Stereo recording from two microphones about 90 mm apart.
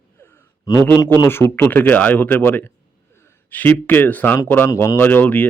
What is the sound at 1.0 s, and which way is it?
Speech, 35° left (ahead or behind).